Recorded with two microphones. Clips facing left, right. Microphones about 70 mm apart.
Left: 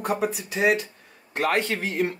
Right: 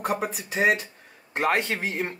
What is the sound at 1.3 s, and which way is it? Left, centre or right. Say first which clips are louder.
Speech: even; centre.